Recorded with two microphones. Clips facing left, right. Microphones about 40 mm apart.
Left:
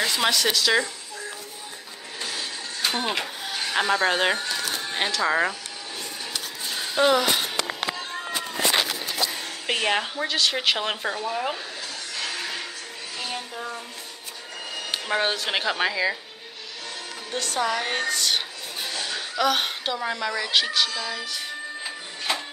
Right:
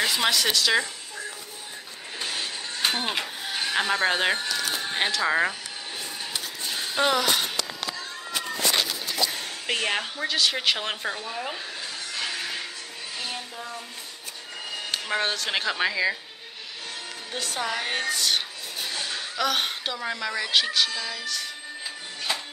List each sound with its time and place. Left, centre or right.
0.0 s a woman's voice: centre
2.1 s train: right
3.0 s a woman's voice: centre
7.0 s speech: centre
9.7 s a woman's voice: centre
12.4 s music: centre
14.9 s speech: centre
17.3 s a woman's voice: centre
21.4 s music: centre